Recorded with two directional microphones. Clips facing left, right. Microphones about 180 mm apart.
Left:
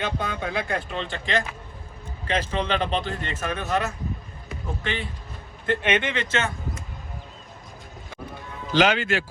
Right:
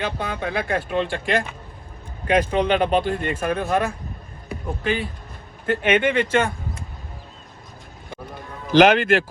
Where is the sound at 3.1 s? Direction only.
50° right (ahead or behind).